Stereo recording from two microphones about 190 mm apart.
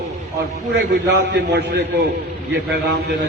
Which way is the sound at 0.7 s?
60° right (ahead or behind).